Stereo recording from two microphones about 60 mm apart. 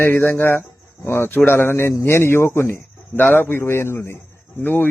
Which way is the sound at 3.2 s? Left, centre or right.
Left.